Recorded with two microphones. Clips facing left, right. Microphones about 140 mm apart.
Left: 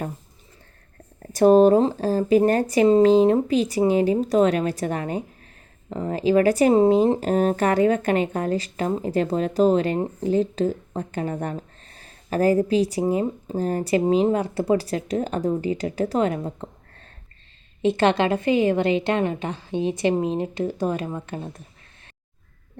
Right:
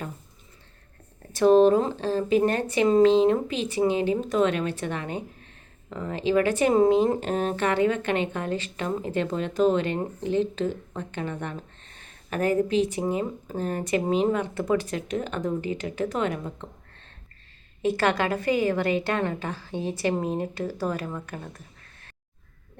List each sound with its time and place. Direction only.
1.3 s speech: 40° left (ahead or behind)
17.8 s a woman's voice: 25° left (ahead or behind)